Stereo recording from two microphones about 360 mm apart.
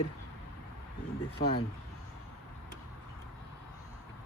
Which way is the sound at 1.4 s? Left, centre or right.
Centre.